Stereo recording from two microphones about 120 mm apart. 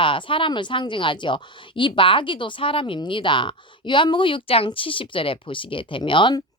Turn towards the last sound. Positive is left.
turn(degrees=40)  # may be behind; listen again after turning